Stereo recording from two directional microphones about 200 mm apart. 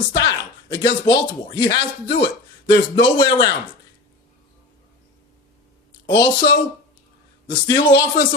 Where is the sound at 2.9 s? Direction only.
25° left (ahead or behind).